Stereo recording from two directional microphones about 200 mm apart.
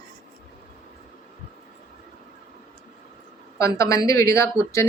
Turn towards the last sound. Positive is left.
turn(degrees=15)  # may be behind; listen again after turning